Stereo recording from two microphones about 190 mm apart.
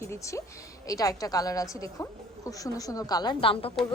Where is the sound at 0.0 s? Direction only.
15° left (ahead or behind).